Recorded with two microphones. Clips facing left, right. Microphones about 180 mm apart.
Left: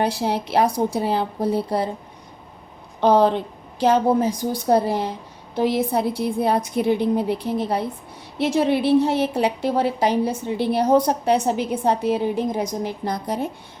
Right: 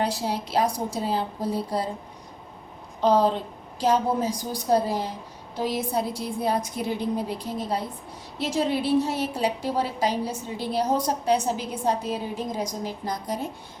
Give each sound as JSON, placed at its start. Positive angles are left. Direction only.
{"t": 0.0, "sound": "a woman's voice", "side_deg": 60}
{"t": 3.0, "sound": "a woman's voice", "side_deg": 65}